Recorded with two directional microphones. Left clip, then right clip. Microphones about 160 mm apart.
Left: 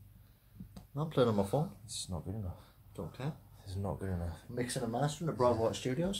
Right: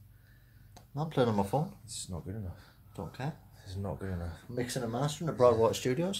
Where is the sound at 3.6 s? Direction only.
15° left (ahead or behind).